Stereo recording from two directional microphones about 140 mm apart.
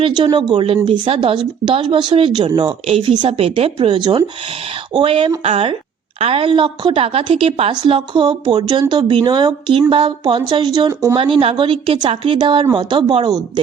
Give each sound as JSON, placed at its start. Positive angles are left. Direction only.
{"t": 0.0, "sound": "a woman's voice", "side_deg": -35}
{"t": 11.2, "sound": "speech", "side_deg": -40}